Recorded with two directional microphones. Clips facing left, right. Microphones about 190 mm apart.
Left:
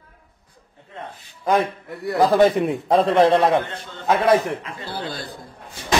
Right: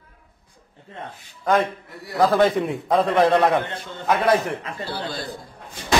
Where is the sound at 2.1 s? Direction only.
20° left (ahead or behind).